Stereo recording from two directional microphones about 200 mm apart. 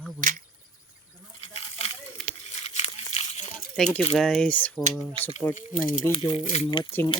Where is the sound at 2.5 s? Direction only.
35° left (ahead or behind).